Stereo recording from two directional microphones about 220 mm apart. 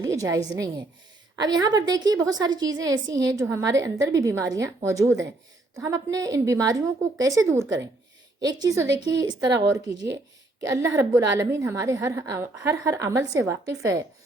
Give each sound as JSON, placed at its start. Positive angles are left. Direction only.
{"t": 0.0, "sound": "a woman's voice", "side_deg": -15}
{"t": 8.4, "sound": "a woman's voice", "side_deg": -15}